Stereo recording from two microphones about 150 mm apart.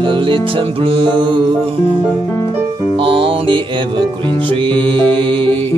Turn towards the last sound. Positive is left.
turn(degrees=-35)  # may be behind; listen again after turning